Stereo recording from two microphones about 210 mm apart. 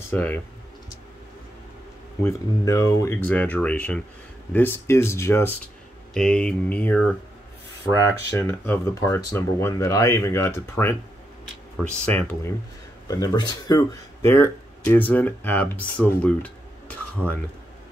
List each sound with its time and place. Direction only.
0.1 s speech: 10° left (ahead or behind)
2.2 s speech: 15° left (ahead or behind)
13.1 s speech: 20° left (ahead or behind)